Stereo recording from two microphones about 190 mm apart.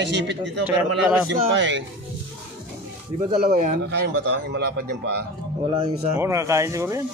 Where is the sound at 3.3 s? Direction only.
40° right (ahead or behind).